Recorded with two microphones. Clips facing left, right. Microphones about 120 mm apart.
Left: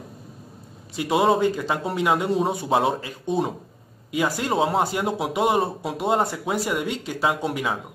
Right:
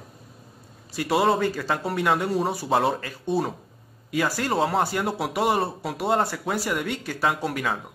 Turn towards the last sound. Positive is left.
turn(degrees=15)  # may be behind; listen again after turning